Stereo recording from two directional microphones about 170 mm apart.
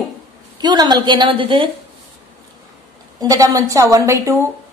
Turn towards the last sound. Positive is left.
turn(degrees=-15)  # may be behind; listen again after turning